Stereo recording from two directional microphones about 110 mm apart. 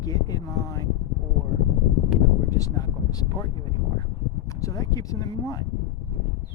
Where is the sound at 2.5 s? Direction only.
35° left (ahead or behind).